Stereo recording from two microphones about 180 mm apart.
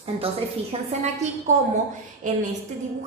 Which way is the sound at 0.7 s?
35° right (ahead or behind).